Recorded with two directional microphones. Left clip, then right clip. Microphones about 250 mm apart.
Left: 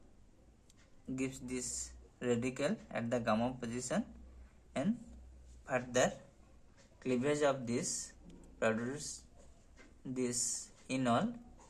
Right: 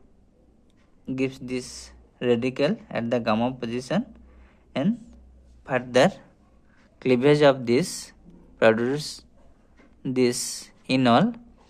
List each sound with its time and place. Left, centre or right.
1.0 s speech: right
5.6 s a man's voice: right
10.0 s a man's voice: right